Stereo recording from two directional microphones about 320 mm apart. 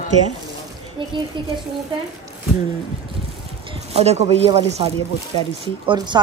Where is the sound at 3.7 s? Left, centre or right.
Centre.